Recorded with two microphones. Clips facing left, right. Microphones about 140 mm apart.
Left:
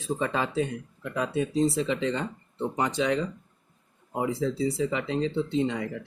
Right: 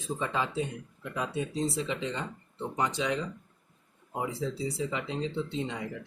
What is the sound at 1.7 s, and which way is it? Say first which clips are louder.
Speech: left 6 dB; 70° left (ahead or behind).